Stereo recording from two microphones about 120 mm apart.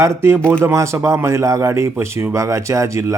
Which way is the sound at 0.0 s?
20° right (ahead or behind).